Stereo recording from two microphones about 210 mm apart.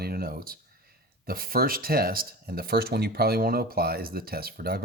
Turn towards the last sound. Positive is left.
turn(degrees=-45)  # may be behind; listen again after turning